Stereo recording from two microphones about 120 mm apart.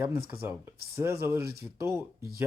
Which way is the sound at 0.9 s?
20° right (ahead or behind).